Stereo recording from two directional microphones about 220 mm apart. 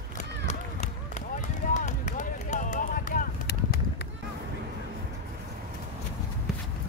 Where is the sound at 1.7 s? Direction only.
30° left (ahead or behind).